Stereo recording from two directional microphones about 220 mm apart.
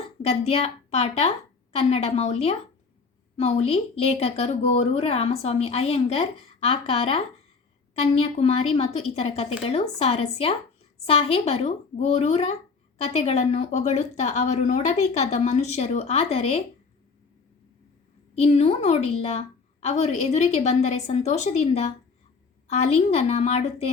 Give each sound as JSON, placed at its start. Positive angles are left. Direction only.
{"t": 0.2, "sound": "speech", "side_deg": 30}
{"t": 18.3, "sound": "speech", "side_deg": 30}